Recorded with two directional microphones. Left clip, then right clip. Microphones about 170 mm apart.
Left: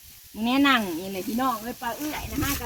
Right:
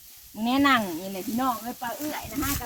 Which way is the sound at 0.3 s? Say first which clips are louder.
Even; 55° right (ahead or behind).